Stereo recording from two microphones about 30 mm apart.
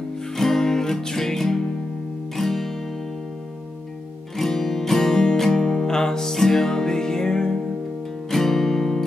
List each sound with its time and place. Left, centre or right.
0.4 s music: centre
4.4 s music: centre
8.3 s music: centre